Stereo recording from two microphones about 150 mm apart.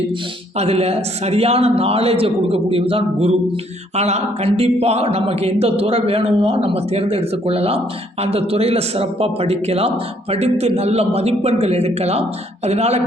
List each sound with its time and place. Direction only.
0.5 s a man's voice: 45° right (ahead or behind)